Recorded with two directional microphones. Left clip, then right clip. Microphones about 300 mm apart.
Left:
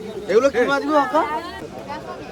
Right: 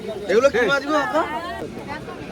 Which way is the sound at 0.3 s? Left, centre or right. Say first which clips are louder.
Even; left.